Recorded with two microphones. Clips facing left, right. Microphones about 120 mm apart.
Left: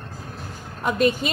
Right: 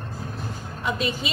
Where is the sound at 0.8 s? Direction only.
50° left (ahead or behind).